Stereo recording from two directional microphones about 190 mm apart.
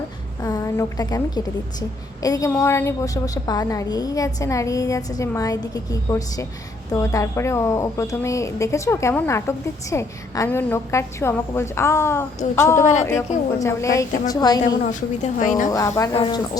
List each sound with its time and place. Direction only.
0.4 s a sound: 15° left (ahead or behind)
2.2 s a woman's voice: 15° left (ahead or behind)
12.8 s a woman's voice: 40° left (ahead or behind)
13.6 s a woman's voice: 15° left (ahead or behind)
14.8 s a woman's voice: 40° left (ahead or behind)
15.7 s a woman's voice: 15° left (ahead or behind)